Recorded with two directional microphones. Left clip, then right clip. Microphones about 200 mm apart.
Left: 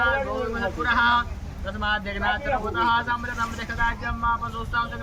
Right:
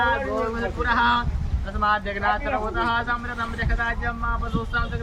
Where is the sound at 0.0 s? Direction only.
30° left (ahead or behind).